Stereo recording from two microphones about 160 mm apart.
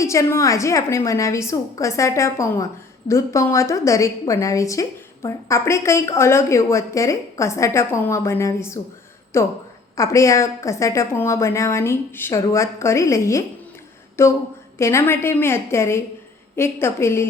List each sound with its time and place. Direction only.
0.0 s a woman's voice: 20° left (ahead or behind)